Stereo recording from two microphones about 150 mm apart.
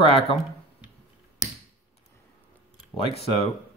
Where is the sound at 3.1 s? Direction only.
45° left (ahead or behind).